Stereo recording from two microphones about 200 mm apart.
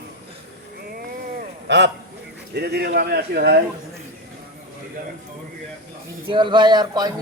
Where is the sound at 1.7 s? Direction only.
60° right (ahead or behind).